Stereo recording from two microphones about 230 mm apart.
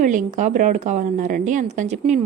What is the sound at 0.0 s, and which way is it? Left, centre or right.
A woman's voice, right.